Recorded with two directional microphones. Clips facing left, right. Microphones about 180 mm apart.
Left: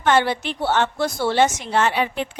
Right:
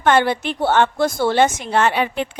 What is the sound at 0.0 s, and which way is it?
A woman's voice, 55° right (ahead or behind).